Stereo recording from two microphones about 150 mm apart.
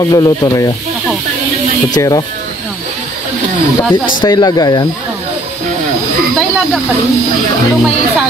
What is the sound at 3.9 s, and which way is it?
Speech, 30° left (ahead or behind).